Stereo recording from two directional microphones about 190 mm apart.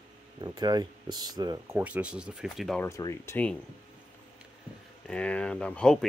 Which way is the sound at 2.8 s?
15° left (ahead or behind).